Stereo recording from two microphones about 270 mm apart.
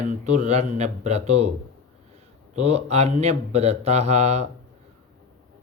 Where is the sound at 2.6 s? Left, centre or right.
Right.